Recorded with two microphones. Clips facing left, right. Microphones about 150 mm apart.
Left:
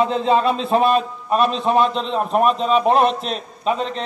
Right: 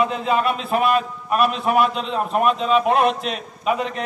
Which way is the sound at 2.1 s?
Centre (ahead or behind).